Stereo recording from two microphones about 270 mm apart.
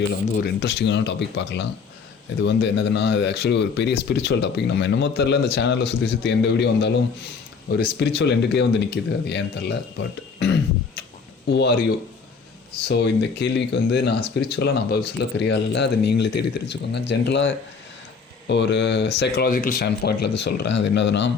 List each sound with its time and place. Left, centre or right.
0.3 s speech: left
7.9 s speech: left